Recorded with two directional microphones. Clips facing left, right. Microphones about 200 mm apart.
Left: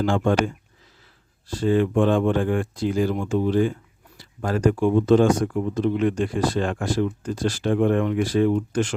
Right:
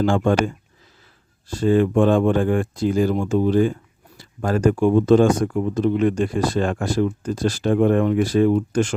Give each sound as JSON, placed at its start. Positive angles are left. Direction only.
{"t": 0.0, "sound": "speech", "side_deg": -45}